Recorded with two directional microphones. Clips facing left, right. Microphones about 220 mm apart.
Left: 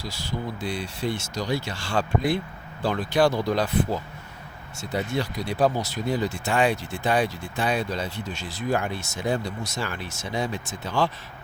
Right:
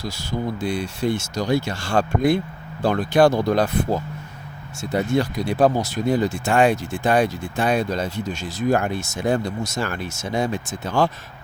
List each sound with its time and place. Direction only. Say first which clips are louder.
0.0 s speech: right 5 dB; 45° right (ahead or behind)